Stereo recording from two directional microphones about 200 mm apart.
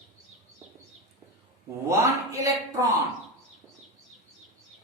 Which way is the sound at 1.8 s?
15° right (ahead or behind).